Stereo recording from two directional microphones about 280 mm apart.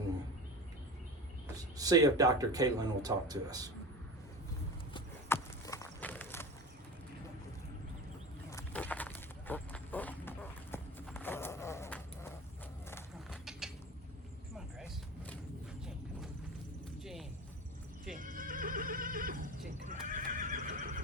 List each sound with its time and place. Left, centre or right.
1.5 s speech: centre
4.9 s horse: centre
8.4 s a sound: centre
13.3 s mechanisms: centre
17.0 s a sound: centre
18.1 s neigh: right